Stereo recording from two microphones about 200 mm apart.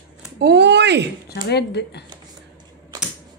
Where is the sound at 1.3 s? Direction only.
55° left (ahead or behind).